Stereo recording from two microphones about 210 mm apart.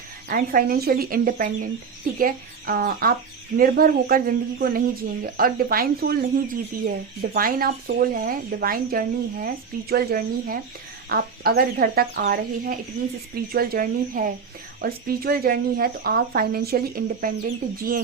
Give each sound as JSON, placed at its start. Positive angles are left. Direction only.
{"t": 0.3, "sound": "speech", "side_deg": -45}